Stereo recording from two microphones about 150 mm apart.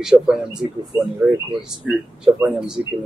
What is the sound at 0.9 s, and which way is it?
Speech, 15° right (ahead or behind).